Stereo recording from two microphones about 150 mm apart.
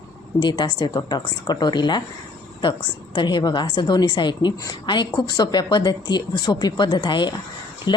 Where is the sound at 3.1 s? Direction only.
30° left (ahead or behind).